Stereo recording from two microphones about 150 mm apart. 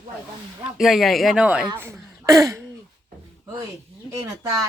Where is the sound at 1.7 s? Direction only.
20° right (ahead or behind).